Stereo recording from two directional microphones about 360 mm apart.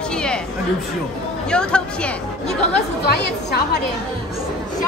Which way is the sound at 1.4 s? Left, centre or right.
Centre.